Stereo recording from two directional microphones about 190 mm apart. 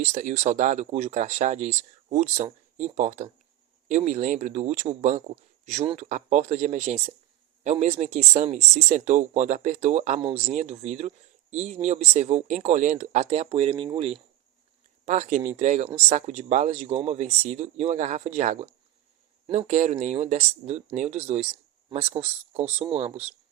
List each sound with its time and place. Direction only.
0.0 s speech: 40° right (ahead or behind)
15.0 s speech: 40° right (ahead or behind)